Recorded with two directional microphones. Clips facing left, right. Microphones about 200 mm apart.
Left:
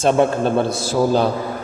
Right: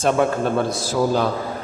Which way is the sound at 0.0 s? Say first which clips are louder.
Left 3 dB; 25° left (ahead or behind).